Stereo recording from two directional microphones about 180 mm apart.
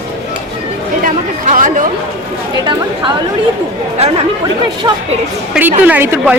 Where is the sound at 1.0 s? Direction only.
45° right (ahead or behind).